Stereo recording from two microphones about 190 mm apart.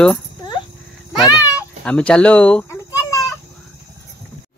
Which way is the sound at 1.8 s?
5° left (ahead or behind).